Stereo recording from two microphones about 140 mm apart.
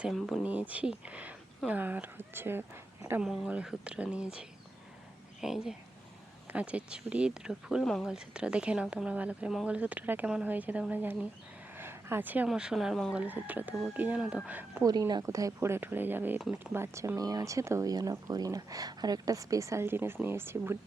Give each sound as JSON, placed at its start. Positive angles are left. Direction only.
{"t": 0.0, "sound": "speech", "side_deg": 0}
{"t": 11.8, "sound": "a sound", "side_deg": -15}
{"t": 12.5, "sound": "speech", "side_deg": -5}
{"t": 13.1, "sound": "speech", "side_deg": -10}
{"t": 14.8, "sound": "speech", "side_deg": -30}